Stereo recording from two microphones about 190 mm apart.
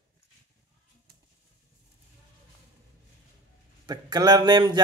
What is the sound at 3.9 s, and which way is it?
Speech, 20° right (ahead or behind).